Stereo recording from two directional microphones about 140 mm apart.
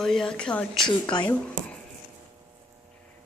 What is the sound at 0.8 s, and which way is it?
Speech, 30° left (ahead or behind).